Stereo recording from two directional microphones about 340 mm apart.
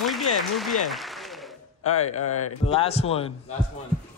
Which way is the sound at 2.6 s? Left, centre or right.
Centre.